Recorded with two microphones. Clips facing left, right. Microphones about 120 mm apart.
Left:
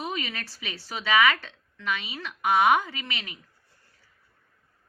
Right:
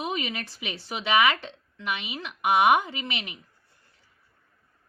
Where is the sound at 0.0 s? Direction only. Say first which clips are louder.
Right 2 dB; 20° right (ahead or behind).